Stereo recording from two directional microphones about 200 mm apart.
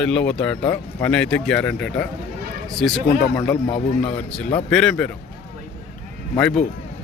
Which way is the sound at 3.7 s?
25° left (ahead or behind).